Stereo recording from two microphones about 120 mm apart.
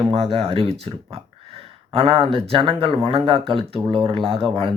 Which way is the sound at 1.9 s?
50° right (ahead or behind).